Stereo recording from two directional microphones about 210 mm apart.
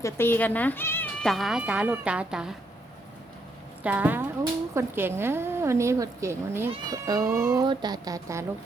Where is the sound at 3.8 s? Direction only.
10° right (ahead or behind).